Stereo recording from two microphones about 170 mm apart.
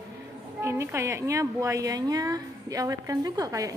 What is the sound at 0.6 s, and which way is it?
A woman's voice, 15° right (ahead or behind).